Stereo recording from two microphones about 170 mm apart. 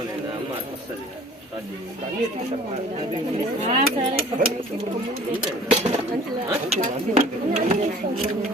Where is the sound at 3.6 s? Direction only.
45° right (ahead or behind).